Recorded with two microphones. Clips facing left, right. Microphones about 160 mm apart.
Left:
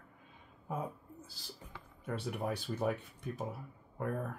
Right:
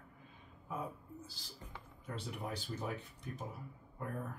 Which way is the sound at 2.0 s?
60° left (ahead or behind).